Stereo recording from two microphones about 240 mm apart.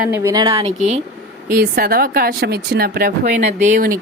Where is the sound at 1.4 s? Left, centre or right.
Right.